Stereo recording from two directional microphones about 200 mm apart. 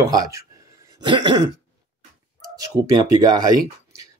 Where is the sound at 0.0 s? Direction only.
15° right (ahead or behind).